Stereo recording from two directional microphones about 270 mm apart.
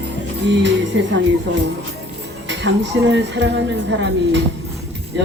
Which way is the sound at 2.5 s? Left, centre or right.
Right.